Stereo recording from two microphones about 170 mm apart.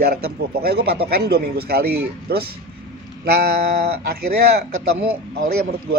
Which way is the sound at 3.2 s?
70° right (ahead or behind).